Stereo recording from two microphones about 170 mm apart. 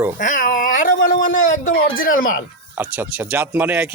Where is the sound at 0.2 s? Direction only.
50° left (ahead or behind).